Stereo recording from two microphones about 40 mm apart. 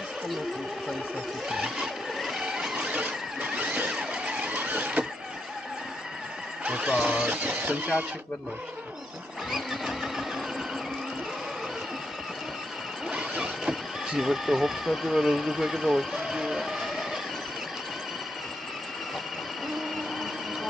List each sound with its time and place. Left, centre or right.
1.5 s a sound: centre
2.7 s squeal: right
3.5 s a sound: right
4.0 s vehicle: right
6.6 s vehicle: right
7.2 s speech: right
9.5 s vehicle: centre
13.4 s speech: centre
16.3 s run: centre
19.7 s vehicle: centre